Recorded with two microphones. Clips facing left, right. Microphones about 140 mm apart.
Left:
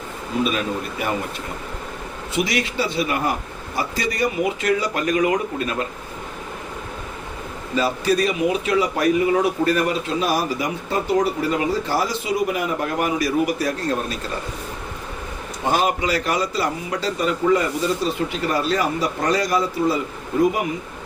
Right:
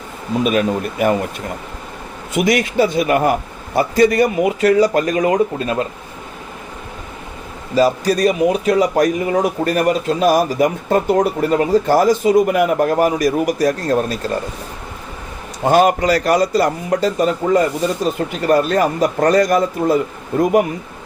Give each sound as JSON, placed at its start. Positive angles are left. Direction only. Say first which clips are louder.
{"t": 0.4, "sound": "speech", "louder": "right 9 dB", "side_deg": -50}
{"t": 2.3, "sound": "speech", "louder": "right 7 dB", "side_deg": -50}
{"t": 7.8, "sound": "speech", "louder": "right 6 dB", "side_deg": -40}
{"t": 15.7, "sound": "speech", "louder": "right 8 dB", "side_deg": -50}